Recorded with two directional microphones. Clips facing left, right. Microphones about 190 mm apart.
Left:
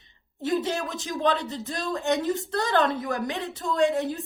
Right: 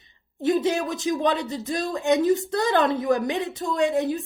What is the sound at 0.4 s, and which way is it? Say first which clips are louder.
Speech: right 5 dB; 15° right (ahead or behind).